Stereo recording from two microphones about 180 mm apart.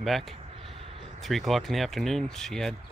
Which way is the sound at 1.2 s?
Centre (ahead or behind).